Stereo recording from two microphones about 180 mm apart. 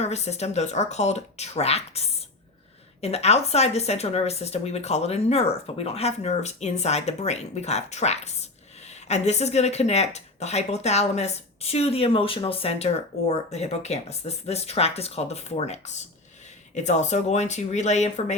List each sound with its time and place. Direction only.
0.0 s speech: 35° left (ahead or behind)